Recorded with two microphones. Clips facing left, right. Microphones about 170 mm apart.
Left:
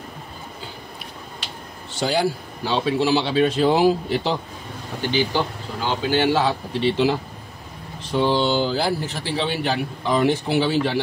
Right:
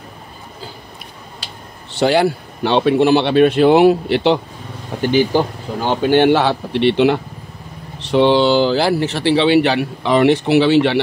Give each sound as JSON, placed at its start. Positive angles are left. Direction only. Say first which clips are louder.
{"t": 1.9, "sound": "a man's voice", "louder": "right 7 dB", "side_deg": -65}
{"t": 5.0, "sound": "a man's voice", "louder": "right 7 dB", "side_deg": -45}